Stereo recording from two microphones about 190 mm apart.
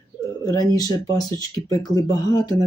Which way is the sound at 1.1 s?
20° left (ahead or behind).